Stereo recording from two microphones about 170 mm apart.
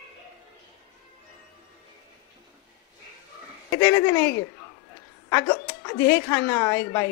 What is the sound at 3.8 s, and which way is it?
Speech, 15° left (ahead or behind).